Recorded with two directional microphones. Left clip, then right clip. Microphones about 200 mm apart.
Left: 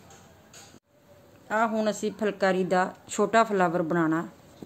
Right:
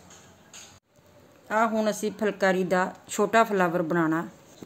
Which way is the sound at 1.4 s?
Centre (ahead or behind).